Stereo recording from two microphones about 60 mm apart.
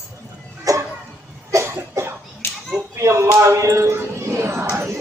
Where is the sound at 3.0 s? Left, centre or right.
Right.